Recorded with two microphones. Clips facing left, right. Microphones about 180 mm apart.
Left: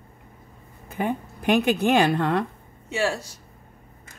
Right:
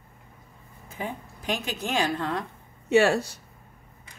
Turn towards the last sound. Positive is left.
turn(degrees=-65)  # may be behind; listen again after turning